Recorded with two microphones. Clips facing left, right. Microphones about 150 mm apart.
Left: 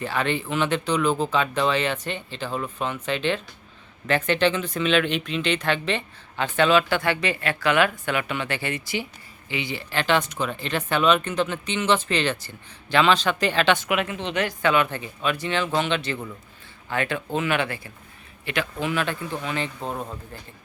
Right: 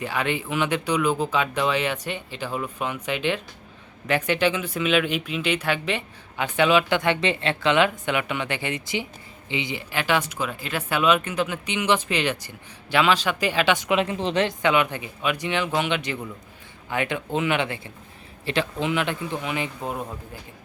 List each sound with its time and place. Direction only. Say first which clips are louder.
0.0 s speech: left 1 dB; 10° right (ahead or behind)
13.9 s a woman's voice: right 3 dB; 30° right (ahead or behind)
14.4 s speech: left 3 dB; 15° right (ahead or behind)